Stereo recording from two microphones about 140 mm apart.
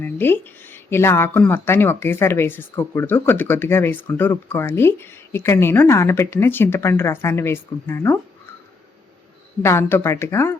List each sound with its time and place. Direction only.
0.0 s speech: 15° left (ahead or behind)
9.6 s speech: 20° left (ahead or behind)